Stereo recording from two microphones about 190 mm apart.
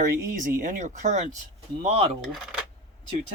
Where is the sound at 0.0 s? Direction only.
45° right (ahead or behind).